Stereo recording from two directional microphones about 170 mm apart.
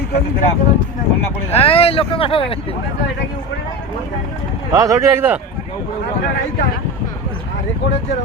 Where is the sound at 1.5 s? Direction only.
35° left (ahead or behind).